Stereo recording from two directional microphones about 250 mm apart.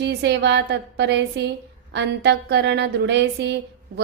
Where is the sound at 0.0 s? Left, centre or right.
Right.